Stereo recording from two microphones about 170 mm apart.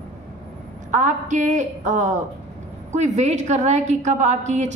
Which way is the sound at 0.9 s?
45° right (ahead or behind).